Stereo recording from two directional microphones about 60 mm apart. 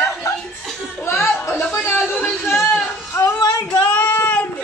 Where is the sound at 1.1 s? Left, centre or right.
Left.